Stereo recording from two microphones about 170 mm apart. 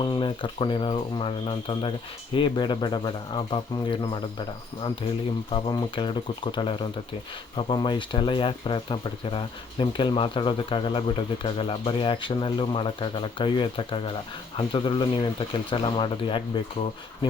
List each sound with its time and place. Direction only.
0.0 s speech: 30° left (ahead or behind)